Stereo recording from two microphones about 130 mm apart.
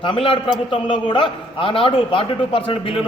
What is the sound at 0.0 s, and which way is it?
A man's voice, 40° left (ahead or behind).